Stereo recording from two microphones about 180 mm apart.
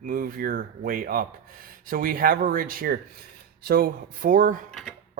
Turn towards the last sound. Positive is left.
turn(degrees=5)  # may be behind; listen again after turning